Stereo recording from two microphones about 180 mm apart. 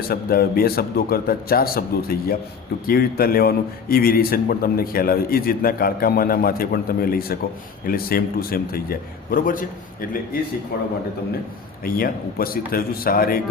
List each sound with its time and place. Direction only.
0.1 s a man's voice: 55° left (ahead or behind)
11.8 s a man's voice: 55° left (ahead or behind)